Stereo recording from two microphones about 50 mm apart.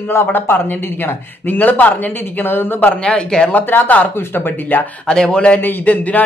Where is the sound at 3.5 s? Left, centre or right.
Left.